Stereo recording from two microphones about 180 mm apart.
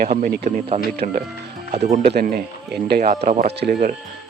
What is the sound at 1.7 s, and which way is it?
Speech, 40° right (ahead or behind).